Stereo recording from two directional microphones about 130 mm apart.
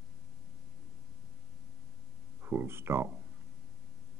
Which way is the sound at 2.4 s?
15° right (ahead or behind).